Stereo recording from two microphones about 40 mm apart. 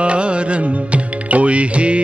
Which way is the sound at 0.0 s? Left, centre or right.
Right.